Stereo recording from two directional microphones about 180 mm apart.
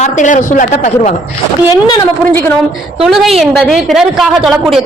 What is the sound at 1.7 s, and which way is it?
Speech, 20° left (ahead or behind).